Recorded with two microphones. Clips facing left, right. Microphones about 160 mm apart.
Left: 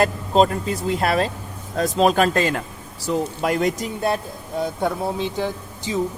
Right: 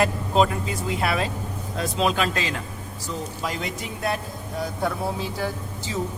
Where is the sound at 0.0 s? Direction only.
40° left (ahead or behind).